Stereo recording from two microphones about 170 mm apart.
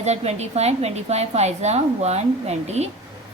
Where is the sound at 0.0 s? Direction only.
40° right (ahead or behind).